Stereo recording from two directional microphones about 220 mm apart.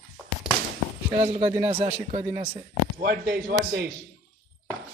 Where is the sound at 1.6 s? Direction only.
10° right (ahead or behind).